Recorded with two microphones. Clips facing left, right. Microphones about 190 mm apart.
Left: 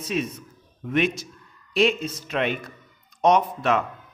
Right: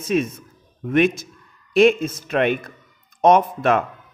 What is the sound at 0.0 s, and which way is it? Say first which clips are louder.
Speech: right 6 dB; 50° right (ahead or behind).